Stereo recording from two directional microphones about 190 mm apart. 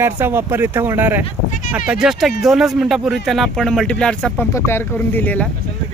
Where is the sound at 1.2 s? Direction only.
40° left (ahead or behind).